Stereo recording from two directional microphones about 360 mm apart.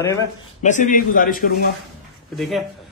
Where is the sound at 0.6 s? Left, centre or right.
Left.